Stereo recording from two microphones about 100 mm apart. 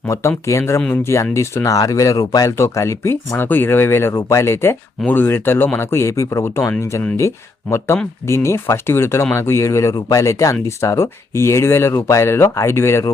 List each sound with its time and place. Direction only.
0.1 s speech: 30° left (ahead or behind)